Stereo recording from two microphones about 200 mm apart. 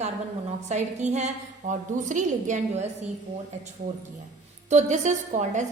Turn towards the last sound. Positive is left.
turn(degrees=-35)  # may be behind; listen again after turning